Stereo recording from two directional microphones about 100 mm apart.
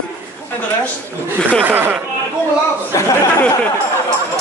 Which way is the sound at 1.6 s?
20° right (ahead or behind).